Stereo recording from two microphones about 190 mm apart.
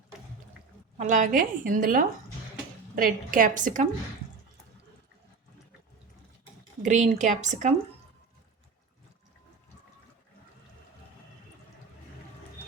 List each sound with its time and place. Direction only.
0.9 s a woman's voice: 40° right (ahead or behind)
6.8 s a woman's voice: 40° right (ahead or behind)